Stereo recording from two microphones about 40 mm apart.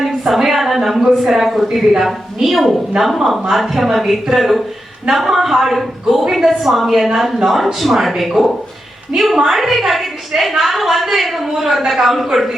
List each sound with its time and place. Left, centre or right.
0.0 s a woman's voice: centre
3.0 s a woman's voice: centre
3.5 s a woman's voice: centre